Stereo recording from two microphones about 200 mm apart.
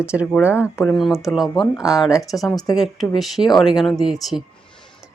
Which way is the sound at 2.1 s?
15° left (ahead or behind).